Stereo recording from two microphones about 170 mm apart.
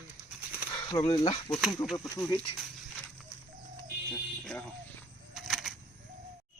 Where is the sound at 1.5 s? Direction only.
5° left (ahead or behind).